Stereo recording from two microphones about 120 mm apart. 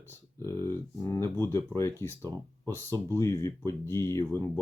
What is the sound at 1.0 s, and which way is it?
Speech, 25° left (ahead or behind).